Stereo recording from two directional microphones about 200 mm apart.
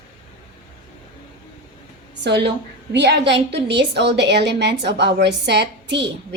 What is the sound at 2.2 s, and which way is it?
A woman's voice, 60° right (ahead or behind).